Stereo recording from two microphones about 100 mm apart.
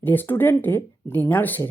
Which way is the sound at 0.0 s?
20° left (ahead or behind).